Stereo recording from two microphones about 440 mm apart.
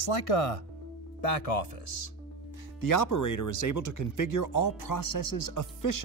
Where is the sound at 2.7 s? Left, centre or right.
Left.